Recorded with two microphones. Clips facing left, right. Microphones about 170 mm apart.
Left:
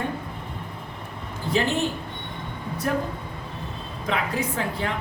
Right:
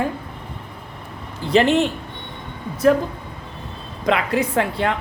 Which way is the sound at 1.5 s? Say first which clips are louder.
Right 8 dB; 80° right.